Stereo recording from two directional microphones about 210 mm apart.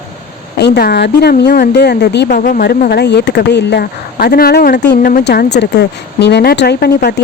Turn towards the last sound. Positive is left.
turn(degrees=50)  # may be behind; listen again after turning